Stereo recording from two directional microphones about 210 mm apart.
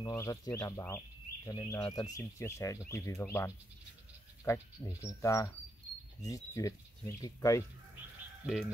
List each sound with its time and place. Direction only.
0.0 s speech: 15° left (ahead or behind)
5.0 s speech: 15° left (ahead or behind)
8.5 s speech: centre (ahead or behind)